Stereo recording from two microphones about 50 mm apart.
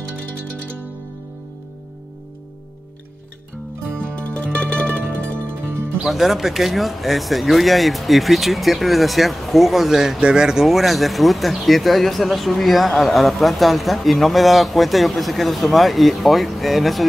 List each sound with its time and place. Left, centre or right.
0.2 s music: centre
4.1 s music: left
6.0 s speech: centre